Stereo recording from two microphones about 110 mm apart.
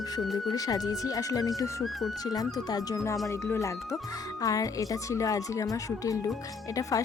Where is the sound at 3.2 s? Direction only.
25° left (ahead or behind).